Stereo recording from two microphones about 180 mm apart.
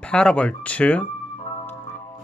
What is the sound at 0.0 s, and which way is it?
Speech, 5° left (ahead or behind).